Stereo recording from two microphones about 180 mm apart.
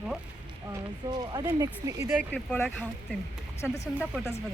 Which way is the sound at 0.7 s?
25° right (ahead or behind).